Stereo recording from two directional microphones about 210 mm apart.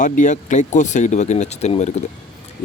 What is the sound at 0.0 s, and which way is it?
Speech, 35° left (ahead or behind).